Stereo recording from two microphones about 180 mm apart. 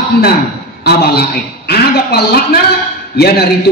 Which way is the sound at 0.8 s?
60° left (ahead or behind).